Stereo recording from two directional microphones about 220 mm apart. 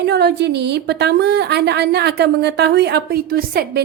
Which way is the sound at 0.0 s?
50° right (ahead or behind).